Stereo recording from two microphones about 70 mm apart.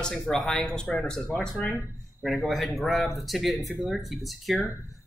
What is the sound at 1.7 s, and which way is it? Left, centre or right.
A man's voice, centre.